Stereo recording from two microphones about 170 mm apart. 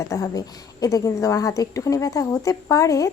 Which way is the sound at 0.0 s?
20° left (ahead or behind).